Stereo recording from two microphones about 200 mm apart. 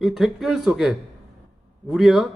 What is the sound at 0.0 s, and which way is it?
A man's voice, centre (ahead or behind).